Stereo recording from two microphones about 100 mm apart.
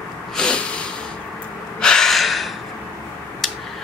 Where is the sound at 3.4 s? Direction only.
5° left (ahead or behind).